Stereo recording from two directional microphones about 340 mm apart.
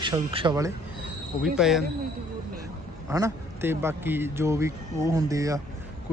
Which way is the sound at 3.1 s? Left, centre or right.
Centre.